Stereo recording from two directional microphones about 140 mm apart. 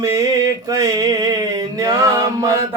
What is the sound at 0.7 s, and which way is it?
Music, 25° right (ahead or behind).